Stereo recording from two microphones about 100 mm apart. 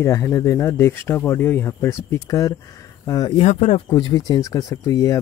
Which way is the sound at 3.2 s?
65° left (ahead or behind).